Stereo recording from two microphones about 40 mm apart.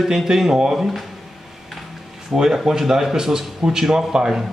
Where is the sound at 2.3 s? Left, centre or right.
Centre.